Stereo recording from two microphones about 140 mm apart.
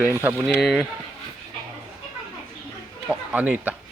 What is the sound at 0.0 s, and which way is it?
Speech, 15° right (ahead or behind).